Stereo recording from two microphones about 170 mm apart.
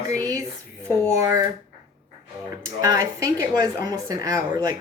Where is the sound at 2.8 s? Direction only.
20° right (ahead or behind).